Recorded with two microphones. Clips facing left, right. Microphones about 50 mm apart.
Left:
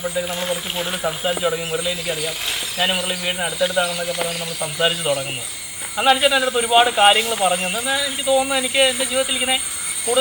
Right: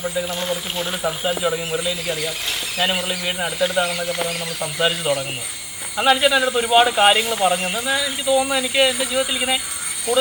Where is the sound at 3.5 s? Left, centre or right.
Right.